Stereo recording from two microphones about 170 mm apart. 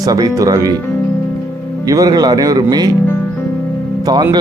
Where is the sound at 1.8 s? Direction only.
20° right (ahead or behind).